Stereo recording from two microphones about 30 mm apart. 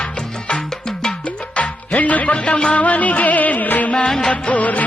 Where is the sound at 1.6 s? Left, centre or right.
Left.